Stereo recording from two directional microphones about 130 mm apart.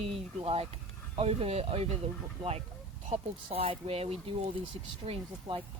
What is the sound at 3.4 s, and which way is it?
Speech, 45° right (ahead or behind).